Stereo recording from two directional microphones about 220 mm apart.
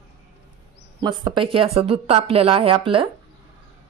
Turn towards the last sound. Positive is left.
turn(degrees=-25)  # may be behind; listen again after turning